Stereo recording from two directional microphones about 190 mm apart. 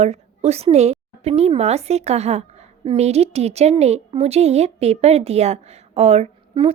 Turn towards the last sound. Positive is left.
turn(degrees=-30)  # may be behind; listen again after turning